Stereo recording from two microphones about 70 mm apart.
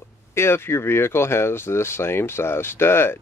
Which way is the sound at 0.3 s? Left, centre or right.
Left.